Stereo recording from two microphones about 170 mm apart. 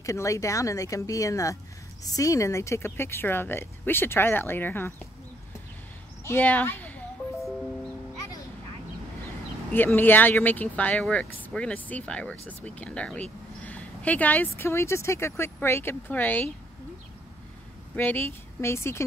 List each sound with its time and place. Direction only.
0.0 s speech: 15° left (ahead or behind)
6.2 s speech: 10° left (ahead or behind)
9.7 s speech: 10° left (ahead or behind)
17.9 s speech: 10° left (ahead or behind)